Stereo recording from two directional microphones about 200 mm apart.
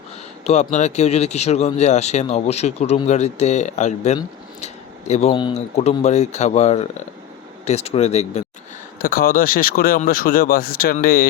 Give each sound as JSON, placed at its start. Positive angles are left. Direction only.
{"t": 0.4, "sound": "speech", "side_deg": 35}
{"t": 4.6, "sound": "a sound", "side_deg": 35}
{"t": 5.3, "sound": "speech", "side_deg": 25}
{"t": 9.0, "sound": "speech", "side_deg": 45}